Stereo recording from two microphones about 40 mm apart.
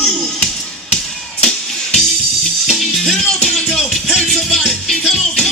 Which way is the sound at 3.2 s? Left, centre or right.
Centre.